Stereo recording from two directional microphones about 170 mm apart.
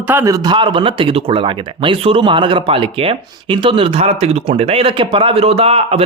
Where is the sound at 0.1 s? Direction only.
15° right (ahead or behind).